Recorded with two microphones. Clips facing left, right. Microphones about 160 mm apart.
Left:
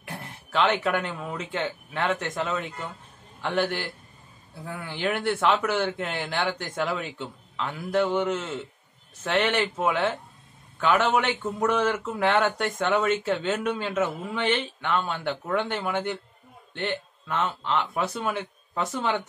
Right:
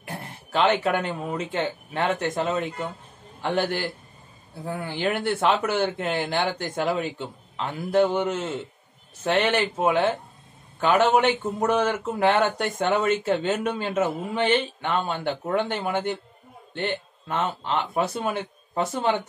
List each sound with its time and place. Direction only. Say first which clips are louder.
0.0 s a man's voice: right 2 dB; 35° right (ahead or behind)